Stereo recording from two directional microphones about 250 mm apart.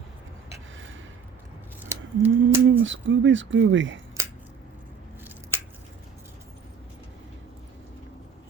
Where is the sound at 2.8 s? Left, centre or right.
Right.